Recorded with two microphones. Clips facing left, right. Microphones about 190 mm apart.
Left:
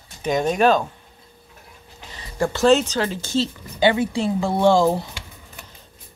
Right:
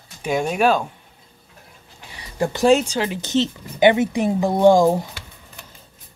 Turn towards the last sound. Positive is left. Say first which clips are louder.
# right 3 dB
turn(degrees=-15)  # may be behind; listen again after turning